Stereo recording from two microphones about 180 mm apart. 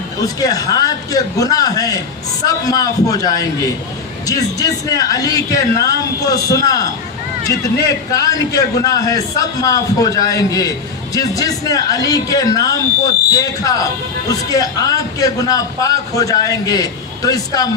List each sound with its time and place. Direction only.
0.2 s a man's voice: 20° left (ahead or behind)